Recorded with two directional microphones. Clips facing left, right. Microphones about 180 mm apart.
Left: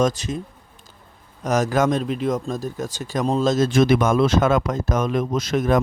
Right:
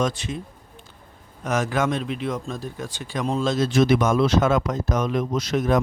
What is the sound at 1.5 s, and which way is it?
Speech, 40° left (ahead or behind).